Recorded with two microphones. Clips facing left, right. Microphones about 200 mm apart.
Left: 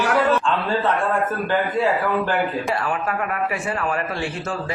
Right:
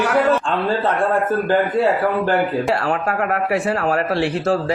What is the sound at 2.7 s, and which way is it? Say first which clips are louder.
Speech: right 4 dB; 70° right (ahead or behind).